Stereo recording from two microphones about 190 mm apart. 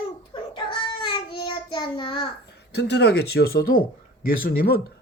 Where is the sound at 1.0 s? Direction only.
25° left (ahead or behind).